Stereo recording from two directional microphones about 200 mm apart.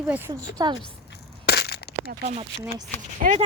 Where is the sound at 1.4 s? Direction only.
55° left (ahead or behind).